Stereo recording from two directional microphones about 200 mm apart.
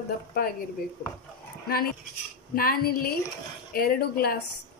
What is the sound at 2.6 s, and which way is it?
Speech, 50° left (ahead or behind).